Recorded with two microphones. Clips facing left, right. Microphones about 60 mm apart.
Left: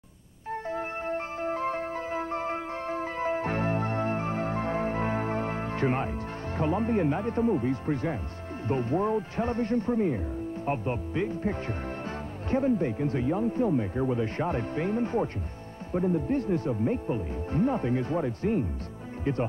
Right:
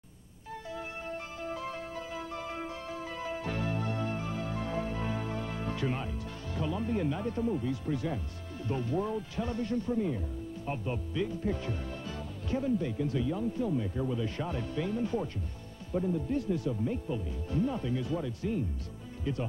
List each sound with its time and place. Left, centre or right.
0.5 s music: left
8.6 s a man's voice: left